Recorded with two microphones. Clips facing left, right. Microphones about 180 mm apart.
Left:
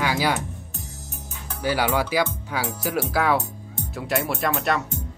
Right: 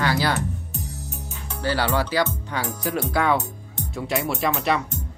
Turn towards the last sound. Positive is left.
turn(degrees=0)  # may be behind; listen again after turning